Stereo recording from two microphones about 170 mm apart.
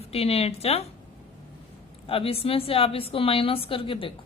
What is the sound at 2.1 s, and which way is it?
A woman's voice, 35° left (ahead or behind).